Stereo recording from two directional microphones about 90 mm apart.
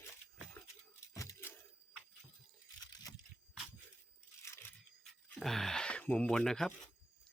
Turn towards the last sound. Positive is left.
turn(degrees=5)  # may be behind; listen again after turning